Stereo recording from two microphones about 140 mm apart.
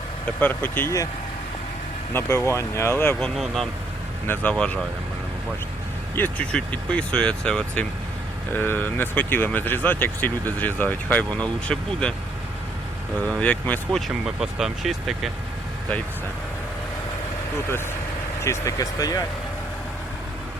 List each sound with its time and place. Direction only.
0.3 s speech: 15° left (ahead or behind)
2.1 s speech: 20° left (ahead or behind)
3.2 s speech: centre (ahead or behind)
6.1 s speech: 10° left (ahead or behind)
13.2 s speech: 10° left (ahead or behind)
14.3 s speech: 5° right (ahead or behind)
18.4 s speech: 20° left (ahead or behind)